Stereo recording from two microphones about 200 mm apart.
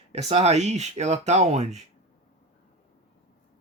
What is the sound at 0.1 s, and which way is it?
Speech, 30° right (ahead or behind).